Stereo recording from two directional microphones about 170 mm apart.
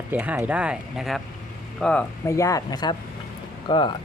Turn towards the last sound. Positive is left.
turn(degrees=30)  # may be behind; listen again after turning